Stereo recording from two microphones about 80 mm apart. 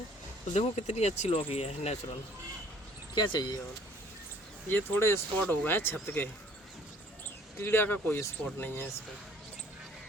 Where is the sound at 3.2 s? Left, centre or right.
Left.